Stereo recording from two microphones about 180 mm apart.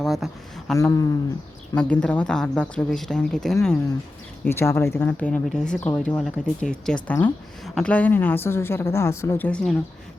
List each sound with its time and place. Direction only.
0.0 s a sound: centre (ahead or behind)
0.8 s speech: 20° left (ahead or behind)
1.7 s speech: 5° left (ahead or behind)
4.4 s speech: 15° left (ahead or behind)